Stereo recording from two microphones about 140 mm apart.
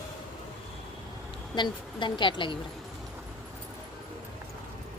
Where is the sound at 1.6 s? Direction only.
35° left (ahead or behind).